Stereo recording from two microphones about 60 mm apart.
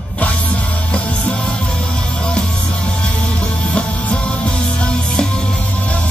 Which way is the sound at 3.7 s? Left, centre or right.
Centre.